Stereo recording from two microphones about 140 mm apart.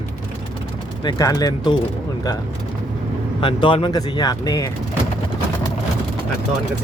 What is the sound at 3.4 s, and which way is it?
Speech, 35° left (ahead or behind).